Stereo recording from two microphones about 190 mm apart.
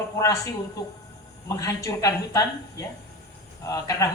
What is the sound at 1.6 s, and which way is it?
Speech, 15° left (ahead or behind).